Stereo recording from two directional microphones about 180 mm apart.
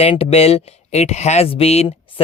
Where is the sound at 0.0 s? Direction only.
35° left (ahead or behind).